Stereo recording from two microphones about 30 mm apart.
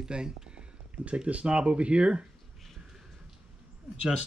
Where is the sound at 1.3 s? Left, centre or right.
Right.